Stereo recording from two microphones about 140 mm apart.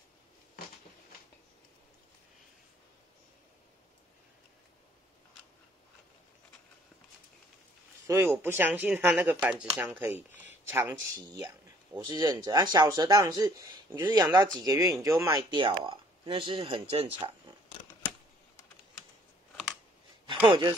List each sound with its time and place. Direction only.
8.1 s speech: 15° right (ahead or behind)
11.1 s speech: 30° right (ahead or behind)
15.3 s speech: 35° right (ahead or behind)
20.4 s speech: 35° right (ahead or behind)